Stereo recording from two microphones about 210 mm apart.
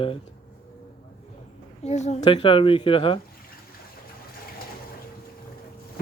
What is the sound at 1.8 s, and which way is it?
Speech, 35° left (ahead or behind).